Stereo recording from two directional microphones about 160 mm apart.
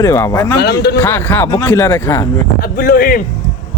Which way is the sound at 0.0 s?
20° left (ahead or behind).